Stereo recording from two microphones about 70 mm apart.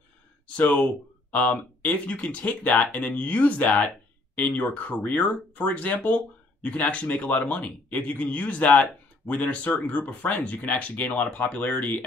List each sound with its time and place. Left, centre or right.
0.6 s speech: left